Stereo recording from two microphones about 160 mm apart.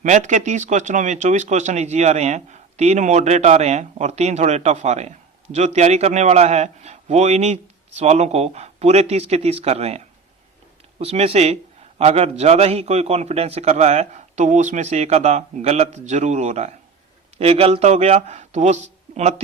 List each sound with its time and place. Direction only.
0.0 s speech: 50° right (ahead or behind)
11.0 s speech: 40° right (ahead or behind)